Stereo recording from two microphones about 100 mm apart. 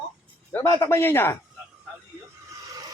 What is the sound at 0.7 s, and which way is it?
Speech, 25° left (ahead or behind).